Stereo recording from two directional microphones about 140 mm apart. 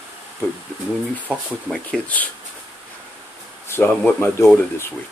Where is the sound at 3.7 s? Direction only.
10° left (ahead or behind).